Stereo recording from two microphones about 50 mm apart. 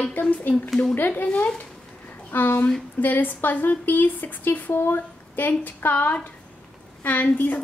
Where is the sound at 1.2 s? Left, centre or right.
Left.